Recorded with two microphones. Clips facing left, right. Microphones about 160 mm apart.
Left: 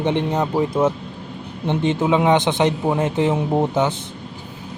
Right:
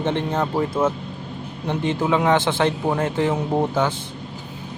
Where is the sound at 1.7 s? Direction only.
20° left (ahead or behind).